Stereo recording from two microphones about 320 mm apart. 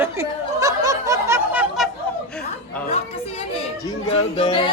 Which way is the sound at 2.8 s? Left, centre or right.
Centre.